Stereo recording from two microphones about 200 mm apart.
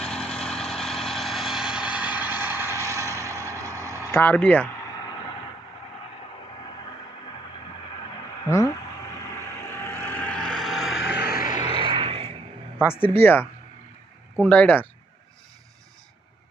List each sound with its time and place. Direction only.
0.0 s vehicle: 5° left (ahead or behind); by 3.3 s 15° right (ahead or behind)
4.1 s speech: 10° left (ahead or behind)
8.5 s a sound: 15° left (ahead or behind)
9.4 s vehicle: 10° left (ahead or behind)
11.0 s vehicle: 60° left (ahead or behind)
11.5 s vehicle: 25° right (ahead or behind)
12.8 s speech: 10° left (ahead or behind)